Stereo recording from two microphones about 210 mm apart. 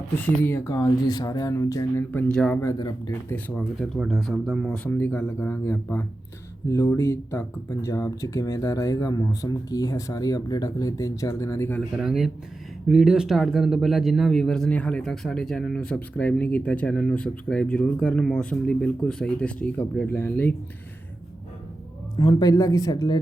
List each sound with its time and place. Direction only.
0.3 s speech: 10° left (ahead or behind)
11.9 s speech: centre (ahead or behind)
22.1 s speech: 20° left (ahead or behind)